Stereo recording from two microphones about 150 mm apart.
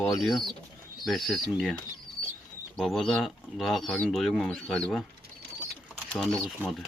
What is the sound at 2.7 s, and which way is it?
Speech, 5° left (ahead or behind).